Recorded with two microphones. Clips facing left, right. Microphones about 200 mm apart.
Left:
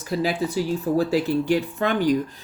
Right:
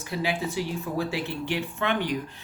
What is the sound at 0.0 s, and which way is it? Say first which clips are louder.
Speech: left 5 dB; 40° left (ahead or behind).